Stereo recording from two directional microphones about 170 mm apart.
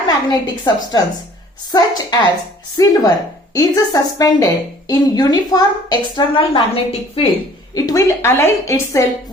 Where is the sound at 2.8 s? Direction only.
20° left (ahead or behind).